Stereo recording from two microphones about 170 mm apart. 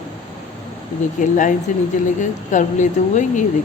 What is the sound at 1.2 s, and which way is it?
A woman's voice, 50° left (ahead or behind).